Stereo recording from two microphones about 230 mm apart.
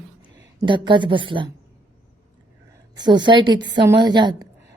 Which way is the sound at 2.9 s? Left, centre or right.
Centre.